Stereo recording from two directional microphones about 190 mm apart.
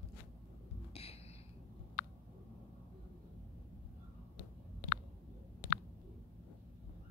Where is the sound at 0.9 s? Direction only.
30° left (ahead or behind).